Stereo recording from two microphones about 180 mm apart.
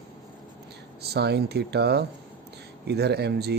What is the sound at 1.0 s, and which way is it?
Speech, 65° right (ahead or behind).